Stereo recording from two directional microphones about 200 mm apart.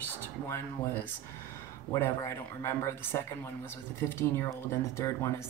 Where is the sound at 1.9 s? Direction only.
15° left (ahead or behind).